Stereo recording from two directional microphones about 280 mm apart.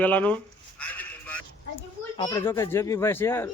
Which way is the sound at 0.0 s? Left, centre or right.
Centre.